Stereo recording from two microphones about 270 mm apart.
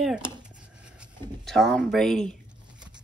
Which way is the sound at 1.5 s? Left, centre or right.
Centre.